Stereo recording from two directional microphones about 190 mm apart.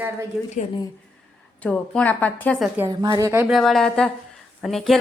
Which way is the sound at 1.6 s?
5° left (ahead or behind).